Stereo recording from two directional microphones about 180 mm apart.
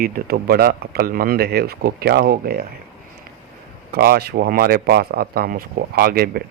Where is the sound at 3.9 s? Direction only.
60° right (ahead or behind).